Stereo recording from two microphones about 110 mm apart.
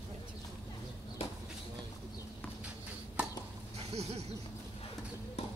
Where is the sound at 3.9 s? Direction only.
75° right (ahead or behind).